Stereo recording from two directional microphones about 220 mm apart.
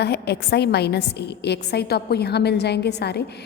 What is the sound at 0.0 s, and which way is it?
A woman's voice, 50° left (ahead or behind).